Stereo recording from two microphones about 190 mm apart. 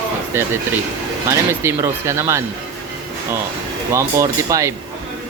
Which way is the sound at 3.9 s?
15° right (ahead or behind).